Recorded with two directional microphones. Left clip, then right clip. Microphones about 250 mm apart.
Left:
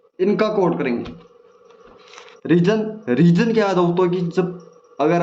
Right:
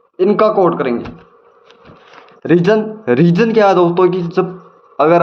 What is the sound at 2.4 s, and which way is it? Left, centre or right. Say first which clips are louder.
Speech: right 6 dB; centre.